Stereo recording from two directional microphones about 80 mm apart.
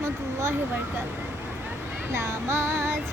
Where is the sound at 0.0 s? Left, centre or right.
Right.